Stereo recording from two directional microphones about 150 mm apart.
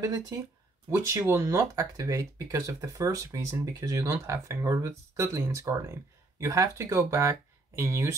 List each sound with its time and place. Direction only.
0.0 s speech: 20° right (ahead or behind)